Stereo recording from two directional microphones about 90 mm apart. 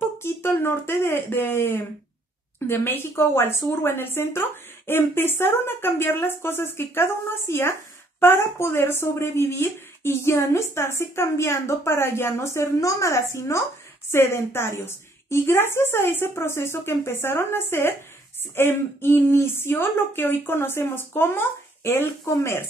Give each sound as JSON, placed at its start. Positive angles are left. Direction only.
{"t": 0.2, "sound": "speech", "side_deg": 25}